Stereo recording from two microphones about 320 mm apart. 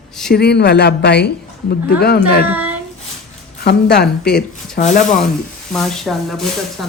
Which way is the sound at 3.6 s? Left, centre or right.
Left.